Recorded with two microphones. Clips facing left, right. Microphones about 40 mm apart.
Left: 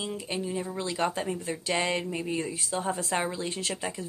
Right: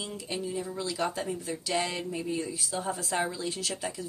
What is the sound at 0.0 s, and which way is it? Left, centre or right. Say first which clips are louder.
Speech: left 2 dB; left.